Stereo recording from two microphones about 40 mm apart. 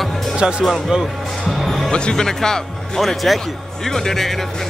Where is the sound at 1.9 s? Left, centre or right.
Centre.